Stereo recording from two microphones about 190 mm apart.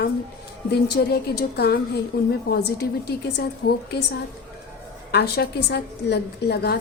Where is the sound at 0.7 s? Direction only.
60° left (ahead or behind).